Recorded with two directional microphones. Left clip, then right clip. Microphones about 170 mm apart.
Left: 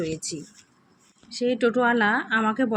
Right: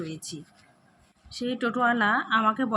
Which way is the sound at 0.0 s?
15° left (ahead or behind).